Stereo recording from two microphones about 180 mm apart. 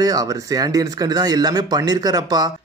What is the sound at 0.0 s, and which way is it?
A man's voice, 20° right (ahead or behind).